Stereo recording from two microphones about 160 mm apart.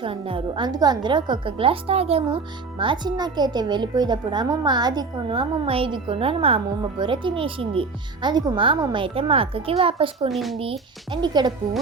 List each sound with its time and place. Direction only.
0.0 s a woman's voice: 35° right (ahead or behind)
10.2 s speech: centre (ahead or behind)
10.6 s a woman's voice: 35° right (ahead or behind)